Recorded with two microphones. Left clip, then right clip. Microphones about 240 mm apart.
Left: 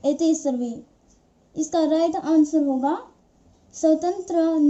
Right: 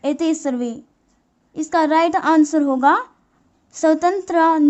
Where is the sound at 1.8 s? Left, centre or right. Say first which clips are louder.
Right 5 dB; right.